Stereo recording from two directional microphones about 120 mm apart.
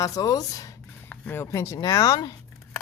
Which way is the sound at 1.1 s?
15° left (ahead or behind).